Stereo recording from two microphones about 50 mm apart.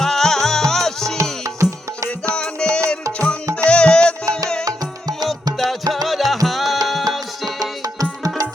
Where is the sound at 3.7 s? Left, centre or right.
Centre.